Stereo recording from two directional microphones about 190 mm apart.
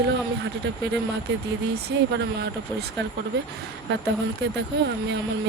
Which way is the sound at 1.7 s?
60° right (ahead or behind).